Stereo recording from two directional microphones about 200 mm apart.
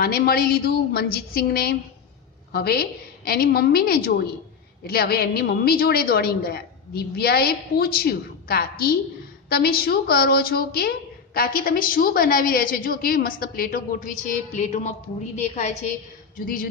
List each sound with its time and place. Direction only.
0.0 s a woman's voice: 50° left (ahead or behind); by 15.7 s 35° left (ahead or behind)